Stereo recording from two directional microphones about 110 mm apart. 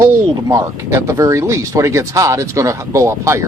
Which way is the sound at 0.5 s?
30° right (ahead or behind).